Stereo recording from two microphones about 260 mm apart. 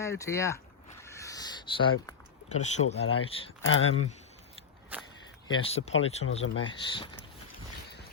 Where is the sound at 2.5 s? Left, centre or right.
Left.